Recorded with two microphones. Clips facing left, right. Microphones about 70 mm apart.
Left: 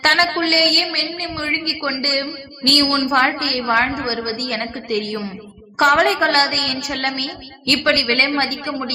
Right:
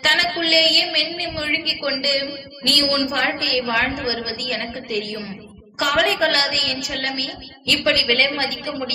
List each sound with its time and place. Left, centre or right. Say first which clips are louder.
0.0 s a woman's voice: left 4 dB; left